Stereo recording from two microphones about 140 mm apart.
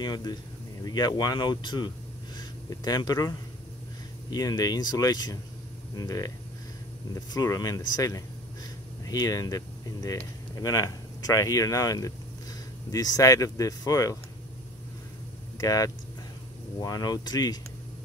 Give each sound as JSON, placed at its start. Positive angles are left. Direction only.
{"t": 0.0, "sound": "speech", "side_deg": 30}
{"t": 7.3, "sound": "speech", "side_deg": 25}
{"t": 15.5, "sound": "speech", "side_deg": 25}